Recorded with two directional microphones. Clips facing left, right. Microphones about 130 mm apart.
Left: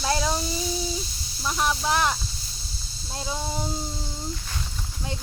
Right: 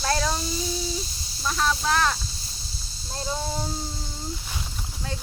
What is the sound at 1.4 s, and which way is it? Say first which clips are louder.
Speech: even; 15° left (ahead or behind).